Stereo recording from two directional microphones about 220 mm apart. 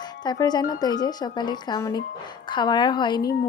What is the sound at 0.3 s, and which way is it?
Speech, 20° left (ahead or behind).